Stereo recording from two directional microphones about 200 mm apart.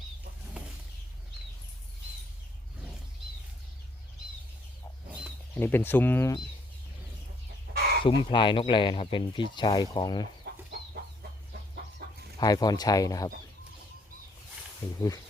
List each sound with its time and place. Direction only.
5.5 s speech: 10° left (ahead or behind)
8.0 s speech: 25° left (ahead or behind)
10.4 s chicken: 50° right (ahead or behind)
12.4 s speech: 20° left (ahead or behind)
14.8 s speech: 10° left (ahead or behind)